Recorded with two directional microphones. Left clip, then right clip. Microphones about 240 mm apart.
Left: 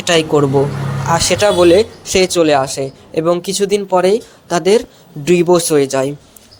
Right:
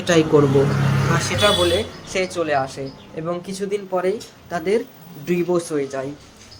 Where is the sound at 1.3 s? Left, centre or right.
Left.